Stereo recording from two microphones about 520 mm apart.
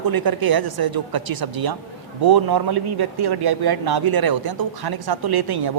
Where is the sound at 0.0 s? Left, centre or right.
Right.